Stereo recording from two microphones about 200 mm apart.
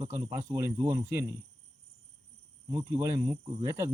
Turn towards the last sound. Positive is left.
turn(degrees=-15)  # may be behind; listen again after turning